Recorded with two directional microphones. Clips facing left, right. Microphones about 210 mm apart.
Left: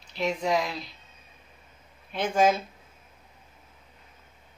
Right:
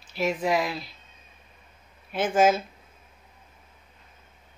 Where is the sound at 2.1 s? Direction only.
5° right (ahead or behind).